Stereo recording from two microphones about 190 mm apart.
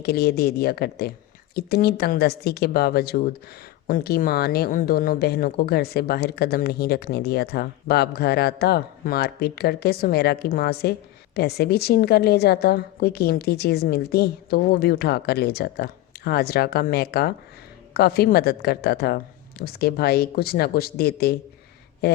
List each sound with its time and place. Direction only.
0.0 s a woman's voice: 55° left (ahead or behind)